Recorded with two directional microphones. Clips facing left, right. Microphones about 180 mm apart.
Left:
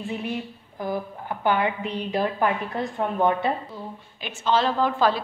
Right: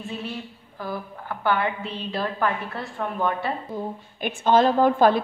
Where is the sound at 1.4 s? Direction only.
15° left (ahead or behind).